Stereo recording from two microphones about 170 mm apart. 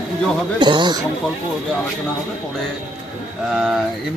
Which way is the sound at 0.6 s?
25° right (ahead or behind).